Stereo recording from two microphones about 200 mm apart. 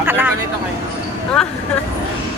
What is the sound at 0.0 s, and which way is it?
Vehicle, 10° right (ahead or behind).